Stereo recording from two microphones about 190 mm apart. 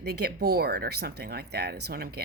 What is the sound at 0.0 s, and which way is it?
Speech, 60° right (ahead or behind).